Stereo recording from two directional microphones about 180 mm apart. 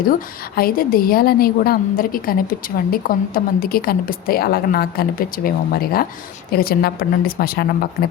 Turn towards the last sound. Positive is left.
turn(degrees=60)  # may be behind; listen again after turning